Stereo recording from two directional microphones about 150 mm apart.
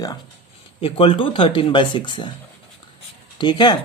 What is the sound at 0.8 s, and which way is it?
Speech, 40° left (ahead or behind).